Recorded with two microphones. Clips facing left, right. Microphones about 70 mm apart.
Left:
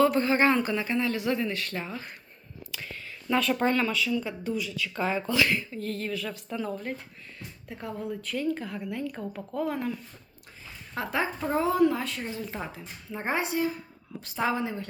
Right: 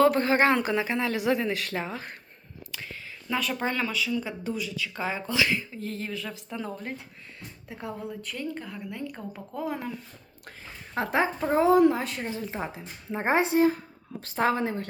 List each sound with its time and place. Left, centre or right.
0.0 s speech: right
3.2 s speech: centre
6.6 s speech: right
7.3 s speech: centre
10.9 s speech: right
14.2 s a woman's voice: right